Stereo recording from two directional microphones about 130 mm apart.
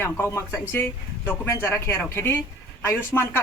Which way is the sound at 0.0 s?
20° left (ahead or behind).